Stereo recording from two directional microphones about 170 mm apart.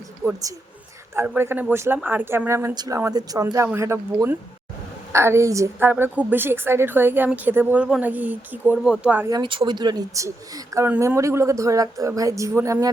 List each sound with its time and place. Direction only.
1.3 s a woman's voice: 10° right (ahead or behind)
9.3 s speech: 30° right (ahead or behind)